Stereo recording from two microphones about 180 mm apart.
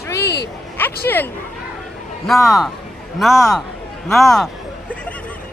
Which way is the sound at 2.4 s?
Centre (ahead or behind).